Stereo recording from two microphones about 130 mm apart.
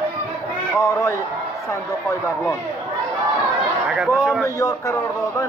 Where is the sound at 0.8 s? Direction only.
20° left (ahead or behind).